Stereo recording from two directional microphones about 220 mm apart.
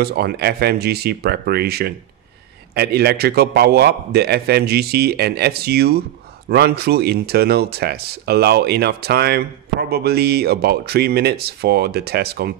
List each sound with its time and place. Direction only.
0.0 s speech: 45° right (ahead or behind)